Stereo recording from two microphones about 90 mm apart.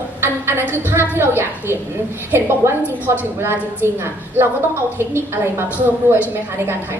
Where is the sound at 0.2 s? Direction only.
30° right (ahead or behind).